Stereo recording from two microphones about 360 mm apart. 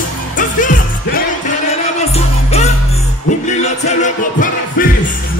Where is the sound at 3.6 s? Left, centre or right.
Centre.